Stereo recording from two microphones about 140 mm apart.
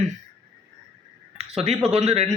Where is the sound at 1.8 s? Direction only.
45° right (ahead or behind).